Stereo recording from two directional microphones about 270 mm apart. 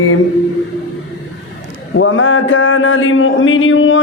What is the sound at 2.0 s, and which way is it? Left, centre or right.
Speech, left.